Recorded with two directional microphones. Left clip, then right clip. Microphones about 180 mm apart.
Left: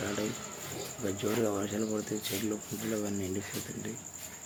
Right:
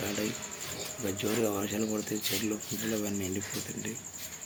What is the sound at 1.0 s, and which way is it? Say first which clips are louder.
Speech: right 1 dB; 10° right (ahead or behind).